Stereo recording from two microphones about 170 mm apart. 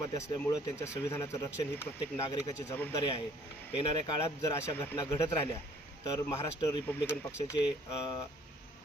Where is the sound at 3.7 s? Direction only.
30° left (ahead or behind).